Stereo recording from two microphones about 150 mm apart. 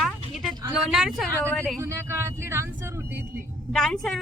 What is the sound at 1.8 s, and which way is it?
Speech, 20° right (ahead or behind).